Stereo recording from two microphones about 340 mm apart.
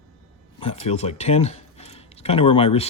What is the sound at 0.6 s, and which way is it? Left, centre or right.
Speech, centre.